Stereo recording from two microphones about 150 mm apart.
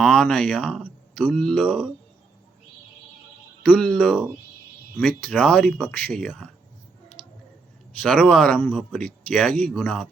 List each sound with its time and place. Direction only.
0.0 s speech: 5° left (ahead or behind)
3.6 s speech: 10° left (ahead or behind)
8.0 s speech: 5° left (ahead or behind)
9.5 s speech: 65° right (ahead or behind)
9.7 s speech: 10° left (ahead or behind)